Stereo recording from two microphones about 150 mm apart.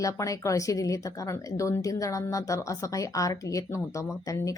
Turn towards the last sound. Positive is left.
turn(degrees=25)  # may be behind; listen again after turning